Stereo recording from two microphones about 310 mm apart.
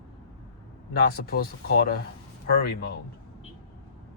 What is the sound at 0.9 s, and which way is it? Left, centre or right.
Speech, left.